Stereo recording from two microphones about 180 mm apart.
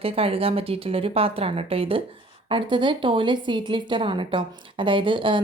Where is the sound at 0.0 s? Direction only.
30° right (ahead or behind).